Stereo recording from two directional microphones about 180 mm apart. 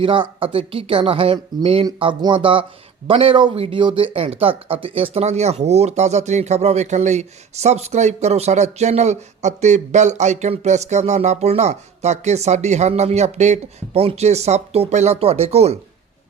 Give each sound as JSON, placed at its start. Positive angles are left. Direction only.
{"t": 0.0, "sound": "a woman's voice", "side_deg": -30}